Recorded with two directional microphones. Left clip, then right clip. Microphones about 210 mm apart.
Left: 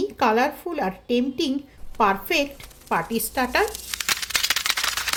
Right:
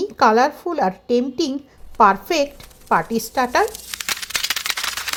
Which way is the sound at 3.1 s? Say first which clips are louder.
Right 4 dB; 15° right (ahead or behind).